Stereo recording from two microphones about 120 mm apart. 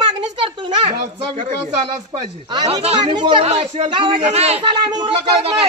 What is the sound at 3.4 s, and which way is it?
A man's voice, 60° right (ahead or behind).